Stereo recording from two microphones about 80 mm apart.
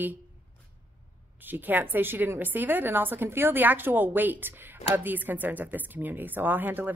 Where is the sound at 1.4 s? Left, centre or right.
Right.